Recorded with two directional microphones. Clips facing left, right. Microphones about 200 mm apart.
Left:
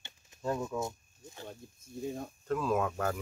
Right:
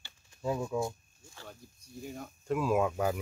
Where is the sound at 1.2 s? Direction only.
20° left (ahead or behind).